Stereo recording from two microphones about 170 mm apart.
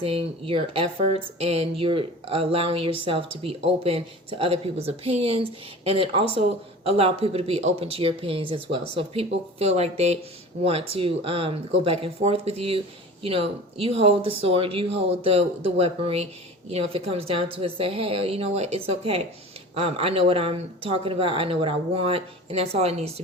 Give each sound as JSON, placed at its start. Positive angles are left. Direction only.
{"t": 0.0, "sound": "speech", "side_deg": -35}